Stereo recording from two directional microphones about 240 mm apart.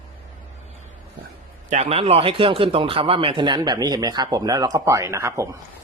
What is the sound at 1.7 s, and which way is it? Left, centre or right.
Speech, right.